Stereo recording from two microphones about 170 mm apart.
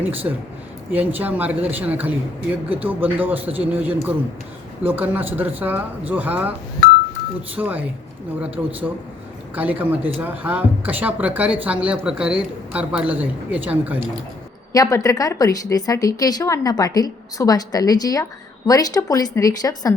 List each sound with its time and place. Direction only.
0.0 s speech: 10° right (ahead or behind)
7.5 s speech: 10° right (ahead or behind)
14.7 s a woman's voice: 20° left (ahead or behind)